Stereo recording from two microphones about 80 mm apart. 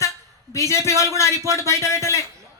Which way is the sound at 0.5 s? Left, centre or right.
Left.